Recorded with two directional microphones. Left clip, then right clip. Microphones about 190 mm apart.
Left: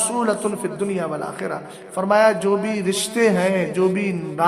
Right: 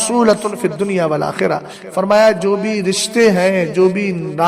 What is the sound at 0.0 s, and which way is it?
A man's voice, 35° right (ahead or behind).